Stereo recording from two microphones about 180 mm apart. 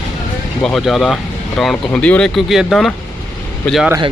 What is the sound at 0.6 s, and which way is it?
Speech, centre (ahead or behind).